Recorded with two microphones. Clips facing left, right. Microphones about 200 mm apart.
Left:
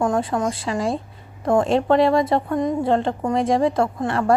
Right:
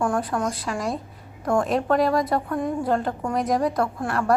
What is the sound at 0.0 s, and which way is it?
A woman's voice, 25° left (ahead or behind).